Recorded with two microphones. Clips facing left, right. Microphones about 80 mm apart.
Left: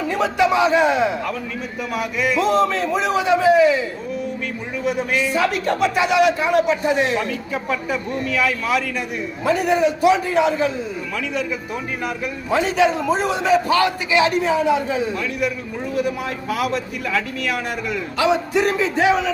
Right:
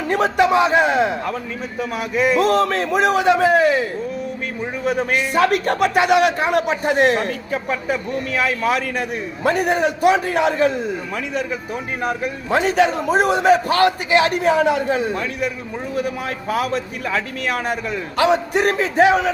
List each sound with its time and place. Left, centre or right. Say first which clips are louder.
0.1 s a man's voice: right 3 dB; right
2.0 s a man's voice: right 3 dB; right
2.5 s a man's voice: even; right
4.9 s a man's voice: right 1 dB; right
12.0 s a man's voice: right 4 dB; right
16.0 s a man's voice: left 1 dB; right
18.2 s a man's voice: right 2 dB; right